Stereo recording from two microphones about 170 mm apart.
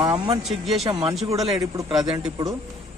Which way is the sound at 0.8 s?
35° right (ahead or behind).